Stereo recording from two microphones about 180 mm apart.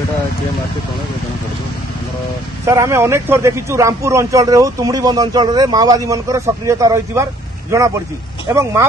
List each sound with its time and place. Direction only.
2.6 s a man's voice: 15° right (ahead or behind)